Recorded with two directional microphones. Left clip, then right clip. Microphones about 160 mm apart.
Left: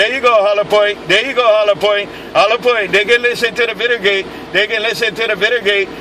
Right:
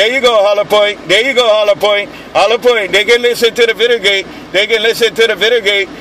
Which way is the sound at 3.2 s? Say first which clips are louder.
Right 4 dB; 40° right (ahead or behind).